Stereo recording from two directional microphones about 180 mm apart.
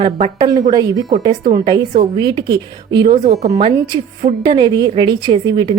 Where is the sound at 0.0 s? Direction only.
25° right (ahead or behind).